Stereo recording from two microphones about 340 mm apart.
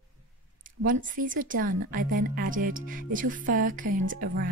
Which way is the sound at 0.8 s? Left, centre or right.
Right.